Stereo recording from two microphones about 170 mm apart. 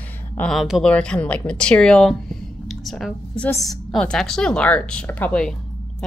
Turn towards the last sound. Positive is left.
turn(degrees=5)  # may be behind; listen again after turning